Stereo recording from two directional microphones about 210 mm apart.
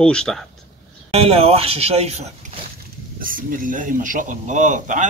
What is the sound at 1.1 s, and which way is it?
Speech, 30° right (ahead or behind).